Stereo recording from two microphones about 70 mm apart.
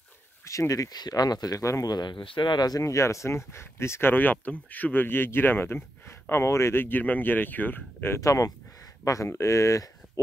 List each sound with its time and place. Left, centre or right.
0.5 s speech: left
1.6 s speech: left
1.9 s speech: left
2.8 s speech: left
8.2 s speech: left